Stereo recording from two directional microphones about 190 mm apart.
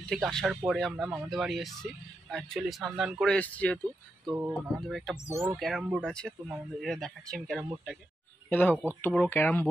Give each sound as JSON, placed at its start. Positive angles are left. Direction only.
{"t": 0.1, "sound": "speech", "side_deg": 0}
{"t": 5.3, "sound": "speech", "side_deg": -15}
{"t": 5.6, "sound": "speech", "side_deg": 0}